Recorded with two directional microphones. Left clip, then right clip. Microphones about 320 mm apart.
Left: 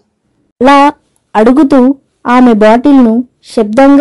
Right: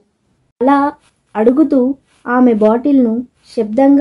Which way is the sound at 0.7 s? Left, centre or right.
Left.